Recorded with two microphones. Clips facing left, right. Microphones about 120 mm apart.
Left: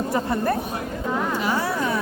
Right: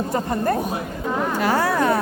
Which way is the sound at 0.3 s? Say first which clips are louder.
Right 2 dB; 45° right (ahead or behind).